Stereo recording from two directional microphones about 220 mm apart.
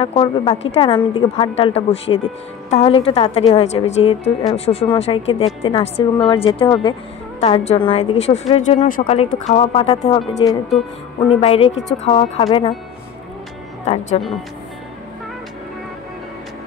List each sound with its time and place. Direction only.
0.0 s a woman's voice: 25° left (ahead or behind)
13.8 s a woman's voice: 30° left (ahead or behind)